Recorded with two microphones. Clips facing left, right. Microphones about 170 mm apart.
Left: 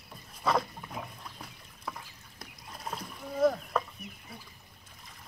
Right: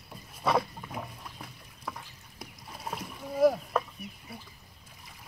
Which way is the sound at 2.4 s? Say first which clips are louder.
Right 2 dB; 5° right (ahead or behind).